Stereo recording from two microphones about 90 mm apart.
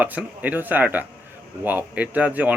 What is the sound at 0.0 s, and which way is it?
Speech, 20° right (ahead or behind).